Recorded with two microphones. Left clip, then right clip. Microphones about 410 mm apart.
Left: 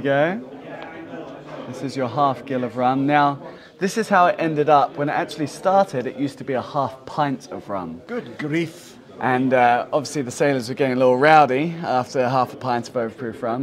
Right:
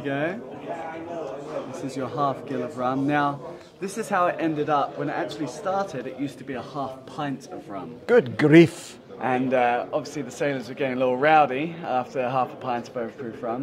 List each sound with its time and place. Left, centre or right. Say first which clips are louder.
0.0 s speech: left 8 dB; left
2.0 s speech: left 6 dB; left
8.1 s speech: right 11 dB; right
9.2 s speech: left 5 dB; left